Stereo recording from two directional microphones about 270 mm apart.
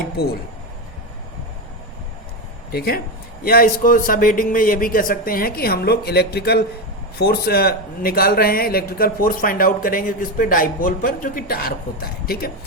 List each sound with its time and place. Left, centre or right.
0.2 s speech: left
2.7 s speech: left